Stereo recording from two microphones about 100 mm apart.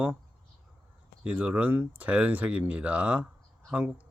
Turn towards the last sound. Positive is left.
turn(degrees=-15)  # may be behind; listen again after turning